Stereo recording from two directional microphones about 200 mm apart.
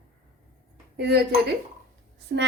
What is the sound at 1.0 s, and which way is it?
Speech, 55° right (ahead or behind).